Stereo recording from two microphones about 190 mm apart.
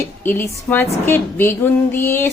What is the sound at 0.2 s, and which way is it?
Speech, 10° left (ahead or behind).